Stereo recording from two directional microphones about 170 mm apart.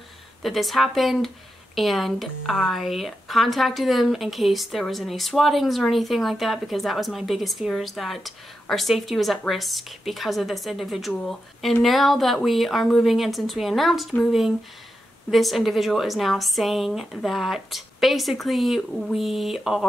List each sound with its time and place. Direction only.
0.4 s a woman's voice: centre (ahead or behind)